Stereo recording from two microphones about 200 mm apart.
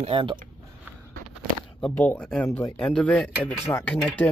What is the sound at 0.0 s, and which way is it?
Speech, 25° right (ahead or behind).